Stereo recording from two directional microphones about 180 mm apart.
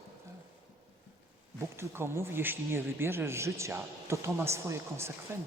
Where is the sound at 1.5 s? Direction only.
15° right (ahead or behind).